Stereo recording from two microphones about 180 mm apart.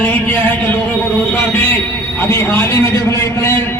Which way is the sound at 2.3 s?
15° left (ahead or behind).